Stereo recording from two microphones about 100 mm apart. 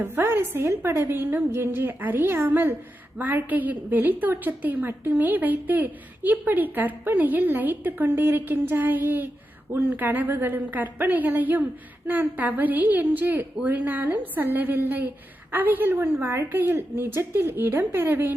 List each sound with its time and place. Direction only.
0.0 s a woman's voice: 20° right (ahead or behind)